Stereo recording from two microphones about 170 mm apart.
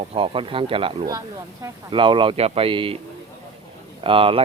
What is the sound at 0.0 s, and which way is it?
Speech, 35° right (ahead or behind).